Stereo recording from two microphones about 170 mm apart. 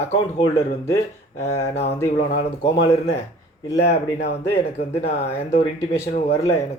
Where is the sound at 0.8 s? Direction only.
15° left (ahead or behind).